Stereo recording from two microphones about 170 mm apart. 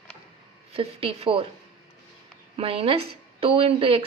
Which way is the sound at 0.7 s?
35° right (ahead or behind).